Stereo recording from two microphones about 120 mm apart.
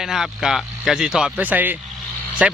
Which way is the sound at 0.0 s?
5° right (ahead or behind).